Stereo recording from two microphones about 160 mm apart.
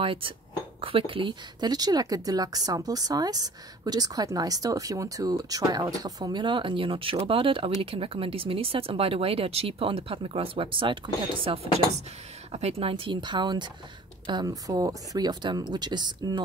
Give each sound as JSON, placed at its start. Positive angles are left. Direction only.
{"t": 0.0, "sound": "a woman's voice", "side_deg": -35}